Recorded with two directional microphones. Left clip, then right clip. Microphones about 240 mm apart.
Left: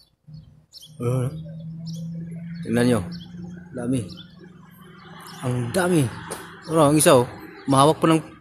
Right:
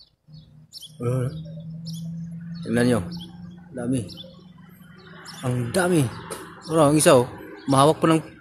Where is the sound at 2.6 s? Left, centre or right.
Centre.